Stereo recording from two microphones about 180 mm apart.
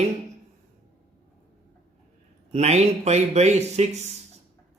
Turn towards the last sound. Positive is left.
turn(degrees=-35)  # may be behind; listen again after turning